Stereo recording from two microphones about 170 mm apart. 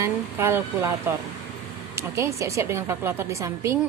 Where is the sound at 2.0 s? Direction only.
15° right (ahead or behind).